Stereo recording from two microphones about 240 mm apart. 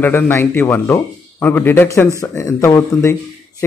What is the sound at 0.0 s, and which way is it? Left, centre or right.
Speech, centre.